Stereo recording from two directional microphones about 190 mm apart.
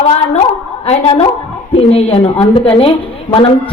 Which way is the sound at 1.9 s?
30° left (ahead or behind).